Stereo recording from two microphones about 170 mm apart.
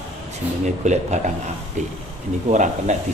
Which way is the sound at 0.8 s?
45° right (ahead or behind).